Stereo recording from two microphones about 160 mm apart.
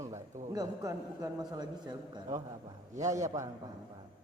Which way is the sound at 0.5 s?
20° right (ahead or behind).